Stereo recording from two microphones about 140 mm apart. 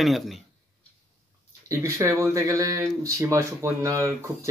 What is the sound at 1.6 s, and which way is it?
Speech, 20° right (ahead or behind).